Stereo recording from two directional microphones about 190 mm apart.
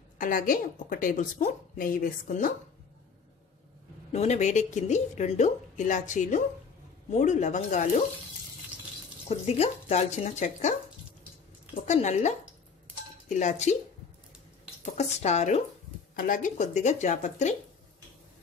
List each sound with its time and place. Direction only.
0.2 s a woman's voice: 45° left (ahead or behind)
4.1 s a woman's voice: 35° left (ahead or behind)
9.5 s a woman's voice: 35° left (ahead or behind)
11.8 s a woman's voice: 40° left (ahead or behind)
15.0 s a woman's voice: 35° left (ahead or behind)